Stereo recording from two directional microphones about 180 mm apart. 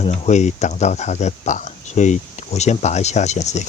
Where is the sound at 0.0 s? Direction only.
40° left (ahead or behind).